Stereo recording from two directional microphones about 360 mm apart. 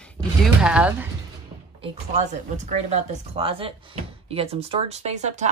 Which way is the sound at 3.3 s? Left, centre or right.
Centre.